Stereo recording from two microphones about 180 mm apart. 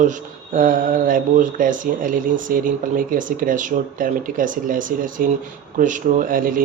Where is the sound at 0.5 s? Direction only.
50° right (ahead or behind).